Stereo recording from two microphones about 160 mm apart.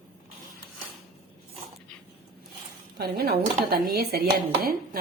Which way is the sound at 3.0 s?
75° right (ahead or behind).